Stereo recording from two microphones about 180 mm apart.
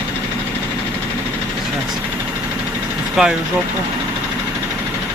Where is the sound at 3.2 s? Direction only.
Centre (ahead or behind).